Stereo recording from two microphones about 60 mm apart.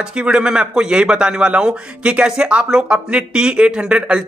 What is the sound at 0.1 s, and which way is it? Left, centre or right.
A man's voice, centre.